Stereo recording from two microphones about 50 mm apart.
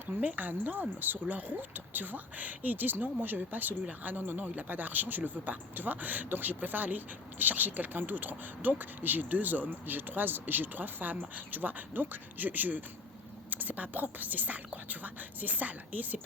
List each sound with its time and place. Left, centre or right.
0.2 s speech: right